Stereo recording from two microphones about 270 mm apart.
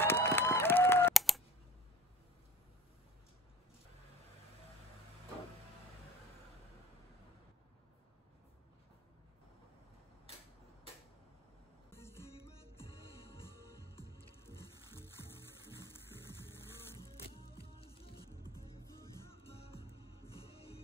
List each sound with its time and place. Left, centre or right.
0.0 s a sound: centre
11.9 s music: centre
13.5 s music: centre
17.7 s music: left
18.3 s music: centre